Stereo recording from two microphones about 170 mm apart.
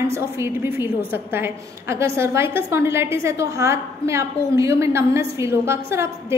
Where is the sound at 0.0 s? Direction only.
15° right (ahead or behind).